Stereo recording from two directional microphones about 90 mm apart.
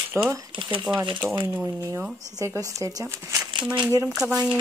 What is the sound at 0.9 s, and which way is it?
Speech, 10° right (ahead or behind).